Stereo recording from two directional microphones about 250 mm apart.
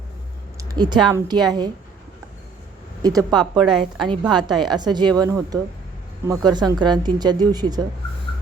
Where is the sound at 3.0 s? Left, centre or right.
Centre.